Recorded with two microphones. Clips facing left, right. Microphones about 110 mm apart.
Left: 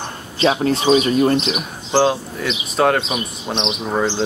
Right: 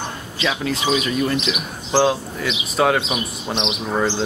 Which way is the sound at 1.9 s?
Centre (ahead or behind).